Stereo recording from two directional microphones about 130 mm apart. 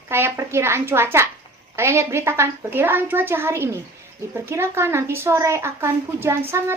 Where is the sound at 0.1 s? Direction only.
20° right (ahead or behind).